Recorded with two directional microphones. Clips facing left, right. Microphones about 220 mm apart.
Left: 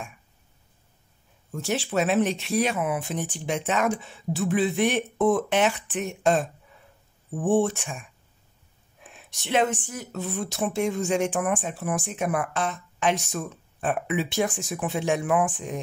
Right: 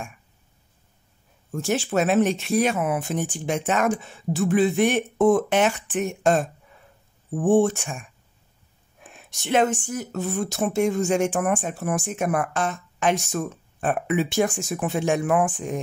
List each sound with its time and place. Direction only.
1.6 s speech: 45° right (ahead or behind)
9.1 s speech: 45° right (ahead or behind)